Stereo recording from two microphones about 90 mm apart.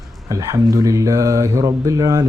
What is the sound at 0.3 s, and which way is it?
Speech, 40° right (ahead or behind).